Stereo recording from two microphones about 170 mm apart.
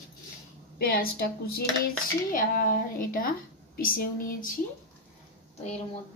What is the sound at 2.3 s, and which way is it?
A woman's voice, 55° left (ahead or behind).